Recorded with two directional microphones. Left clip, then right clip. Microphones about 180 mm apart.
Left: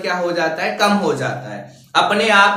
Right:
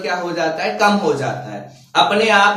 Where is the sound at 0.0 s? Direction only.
20° left (ahead or behind).